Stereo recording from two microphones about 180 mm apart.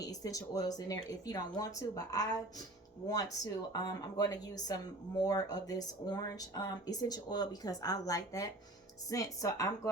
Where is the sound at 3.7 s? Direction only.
20° left (ahead or behind).